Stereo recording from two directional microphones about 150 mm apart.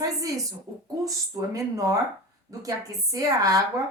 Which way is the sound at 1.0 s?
20° right (ahead or behind).